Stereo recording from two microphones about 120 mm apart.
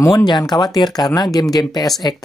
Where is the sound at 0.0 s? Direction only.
30° left (ahead or behind).